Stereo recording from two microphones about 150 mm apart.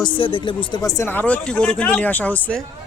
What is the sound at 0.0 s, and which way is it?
Speech, 35° left (ahead or behind).